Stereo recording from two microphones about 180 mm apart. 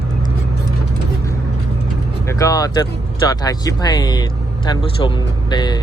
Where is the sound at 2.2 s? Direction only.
15° left (ahead or behind).